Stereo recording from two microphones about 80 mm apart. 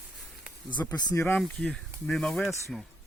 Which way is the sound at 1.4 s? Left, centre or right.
Centre.